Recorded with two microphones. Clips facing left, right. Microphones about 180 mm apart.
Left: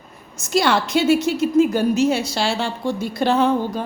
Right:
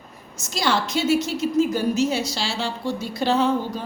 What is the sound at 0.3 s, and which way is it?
A woman's voice, 60° left (ahead or behind).